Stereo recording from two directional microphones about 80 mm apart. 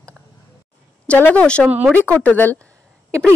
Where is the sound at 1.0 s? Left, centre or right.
Centre.